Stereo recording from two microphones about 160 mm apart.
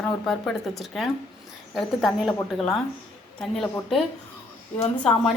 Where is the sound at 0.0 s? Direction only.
5° left (ahead or behind).